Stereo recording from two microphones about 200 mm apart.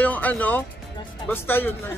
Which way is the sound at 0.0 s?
10° left (ahead or behind).